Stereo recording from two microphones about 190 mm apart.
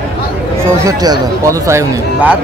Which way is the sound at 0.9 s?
15° right (ahead or behind).